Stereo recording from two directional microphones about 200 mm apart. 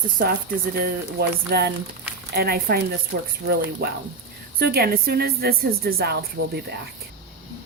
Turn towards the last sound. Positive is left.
turn(degrees=-55)  # may be behind; listen again after turning